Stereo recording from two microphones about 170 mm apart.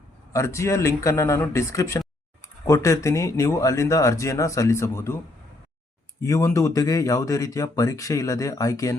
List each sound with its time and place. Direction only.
0.3 s speech: 15° left (ahead or behind)
6.2 s speech: 20° left (ahead or behind)